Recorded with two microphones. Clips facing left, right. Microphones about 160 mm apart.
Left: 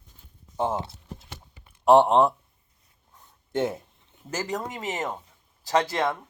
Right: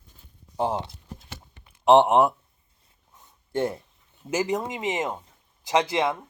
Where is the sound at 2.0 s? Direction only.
10° right (ahead or behind).